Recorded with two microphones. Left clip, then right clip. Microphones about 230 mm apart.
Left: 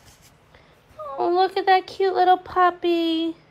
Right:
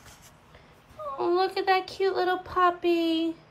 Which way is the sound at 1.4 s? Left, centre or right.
Centre.